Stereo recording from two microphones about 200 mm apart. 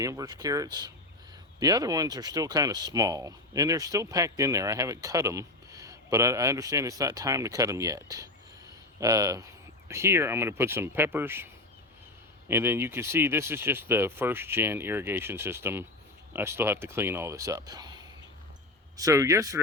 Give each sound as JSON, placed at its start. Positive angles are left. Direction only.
{"t": 0.0, "sound": "speech", "side_deg": -15}
{"t": 12.5, "sound": "speech", "side_deg": -10}